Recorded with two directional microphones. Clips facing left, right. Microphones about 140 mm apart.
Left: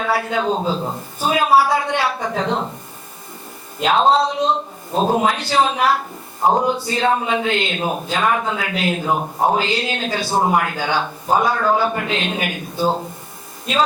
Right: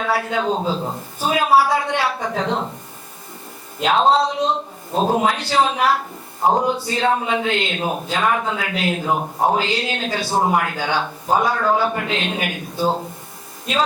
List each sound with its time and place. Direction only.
0.0 s a man's voice: 15° left (ahead or behind)
0.5 s speech: 30° left (ahead or behind)
1.3 s a woman's voice: 15° left (ahead or behind)
4.1 s a woman's voice: 15° left (ahead or behind)
4.9 s speech: 30° left (ahead or behind)
5.2 s a woman's voice: 15° left (ahead or behind)
6.4 s speech: 25° left (ahead or behind)
6.8 s a woman's voice: 15° left (ahead or behind)
9.1 s speech: 30° left (ahead or behind)
9.6 s a woman's voice: 10° left (ahead or behind)
12.8 s speech: 30° left (ahead or behind)